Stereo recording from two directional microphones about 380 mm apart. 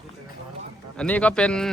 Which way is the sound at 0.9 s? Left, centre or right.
Centre.